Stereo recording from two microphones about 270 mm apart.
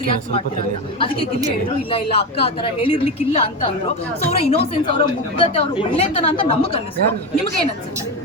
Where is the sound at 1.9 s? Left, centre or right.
Left.